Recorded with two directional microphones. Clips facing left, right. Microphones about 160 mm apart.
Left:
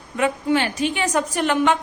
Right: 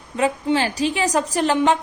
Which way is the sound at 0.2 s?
30° right (ahead or behind).